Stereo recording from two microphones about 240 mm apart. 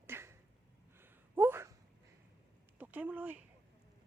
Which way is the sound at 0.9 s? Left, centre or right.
Centre.